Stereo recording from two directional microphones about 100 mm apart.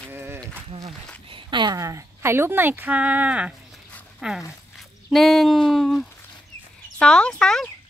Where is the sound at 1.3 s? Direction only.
50° right (ahead or behind).